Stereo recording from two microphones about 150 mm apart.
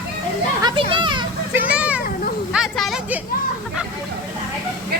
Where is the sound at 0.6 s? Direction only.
30° right (ahead or behind).